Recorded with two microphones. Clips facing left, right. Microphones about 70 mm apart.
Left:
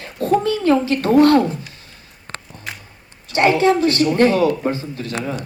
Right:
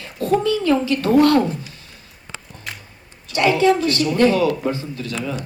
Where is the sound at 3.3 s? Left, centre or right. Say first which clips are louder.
Left 1 dB; left.